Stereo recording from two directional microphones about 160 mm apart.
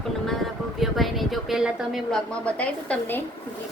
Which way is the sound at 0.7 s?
Centre (ahead or behind).